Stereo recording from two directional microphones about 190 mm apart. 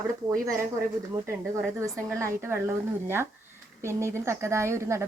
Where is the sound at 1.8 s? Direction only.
15° right (ahead or behind).